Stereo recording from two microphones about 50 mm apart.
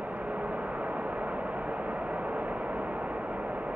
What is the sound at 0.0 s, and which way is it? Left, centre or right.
Vehicle, right.